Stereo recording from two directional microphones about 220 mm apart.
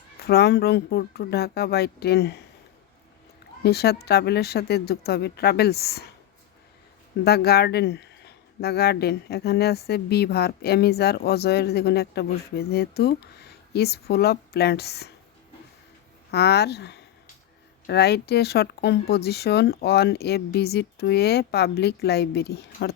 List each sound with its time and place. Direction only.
0.3 s speech: 45° left (ahead or behind)
3.6 s speech: 45° left (ahead or behind)
7.3 s speech: 45° left (ahead or behind)
16.3 s speech: 50° left (ahead or behind)